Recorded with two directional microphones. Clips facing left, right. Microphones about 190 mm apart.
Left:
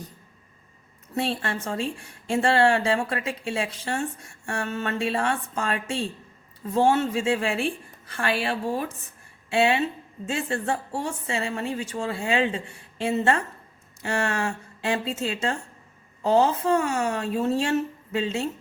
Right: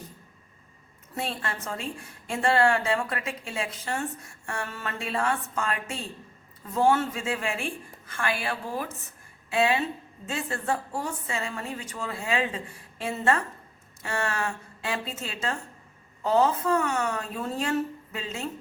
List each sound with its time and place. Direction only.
1.1 s a woman's voice: 30° left (ahead or behind)